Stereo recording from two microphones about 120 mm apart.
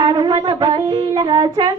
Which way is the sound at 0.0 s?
40° right (ahead or behind).